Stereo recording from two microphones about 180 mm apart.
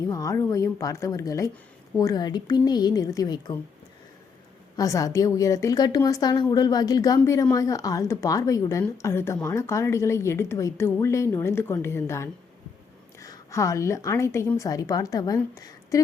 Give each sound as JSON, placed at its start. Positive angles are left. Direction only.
{"t": 0.0, "sound": "a woman's voice", "side_deg": 20}
{"t": 4.8, "sound": "a woman's voice", "side_deg": 20}